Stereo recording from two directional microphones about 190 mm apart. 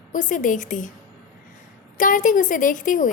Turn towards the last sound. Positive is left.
turn(degrees=45)  # may be behind; listen again after turning